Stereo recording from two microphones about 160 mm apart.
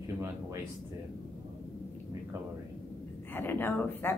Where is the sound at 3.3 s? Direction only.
15° left (ahead or behind).